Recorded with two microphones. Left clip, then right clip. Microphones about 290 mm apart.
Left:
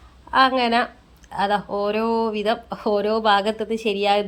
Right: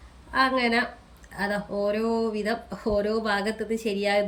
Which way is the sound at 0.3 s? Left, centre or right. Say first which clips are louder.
Left 5 dB; centre.